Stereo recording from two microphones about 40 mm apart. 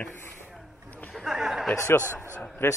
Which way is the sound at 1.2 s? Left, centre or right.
Centre.